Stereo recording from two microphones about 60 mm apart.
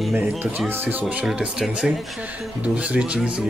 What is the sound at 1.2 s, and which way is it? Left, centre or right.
Speech, centre.